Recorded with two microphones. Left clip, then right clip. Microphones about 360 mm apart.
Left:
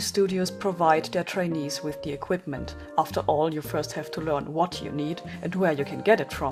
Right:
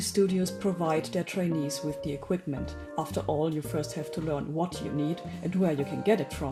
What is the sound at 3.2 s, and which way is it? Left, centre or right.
Speech, left.